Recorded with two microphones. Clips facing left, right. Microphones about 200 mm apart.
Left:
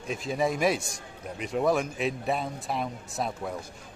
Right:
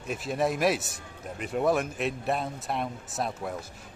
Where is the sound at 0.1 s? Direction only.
5° right (ahead or behind).